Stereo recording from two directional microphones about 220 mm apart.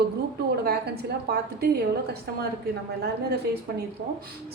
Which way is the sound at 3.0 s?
45° right (ahead or behind).